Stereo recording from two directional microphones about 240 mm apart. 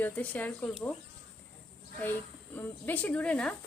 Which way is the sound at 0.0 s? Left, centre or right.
Centre.